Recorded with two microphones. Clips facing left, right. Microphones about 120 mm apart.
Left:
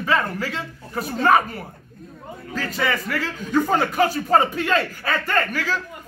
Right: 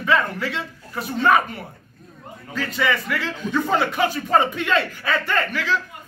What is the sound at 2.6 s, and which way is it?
Speech, 40° left (ahead or behind).